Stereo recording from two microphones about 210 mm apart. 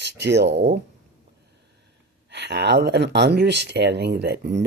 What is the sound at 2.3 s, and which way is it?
Speech, 55° right (ahead or behind).